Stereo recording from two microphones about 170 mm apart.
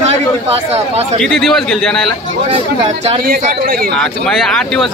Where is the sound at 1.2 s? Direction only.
Centre (ahead or behind).